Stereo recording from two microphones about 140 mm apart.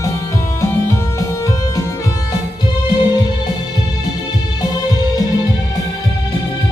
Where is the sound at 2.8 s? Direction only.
30° left (ahead or behind).